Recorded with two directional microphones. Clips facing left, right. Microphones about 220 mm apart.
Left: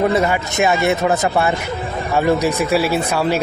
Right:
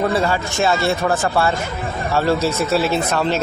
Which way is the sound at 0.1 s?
20° left (ahead or behind).